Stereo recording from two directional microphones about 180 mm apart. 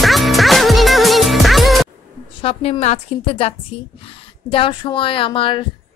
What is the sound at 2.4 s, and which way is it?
A woman's voice, 35° left (ahead or behind).